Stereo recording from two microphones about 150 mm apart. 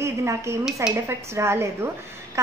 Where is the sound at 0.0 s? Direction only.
20° right (ahead or behind).